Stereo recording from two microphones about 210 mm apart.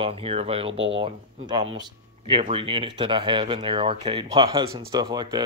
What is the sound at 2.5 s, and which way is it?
Speech, 25° right (ahead or behind).